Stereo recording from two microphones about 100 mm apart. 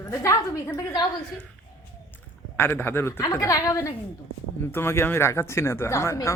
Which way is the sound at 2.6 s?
20° left (ahead or behind).